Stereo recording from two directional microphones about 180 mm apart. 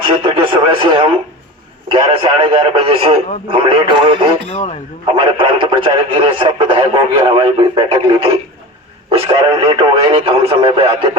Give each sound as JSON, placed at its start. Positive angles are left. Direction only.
{"t": 0.2, "sound": "speech", "side_deg": -30}
{"t": 2.4, "sound": "speech", "side_deg": -30}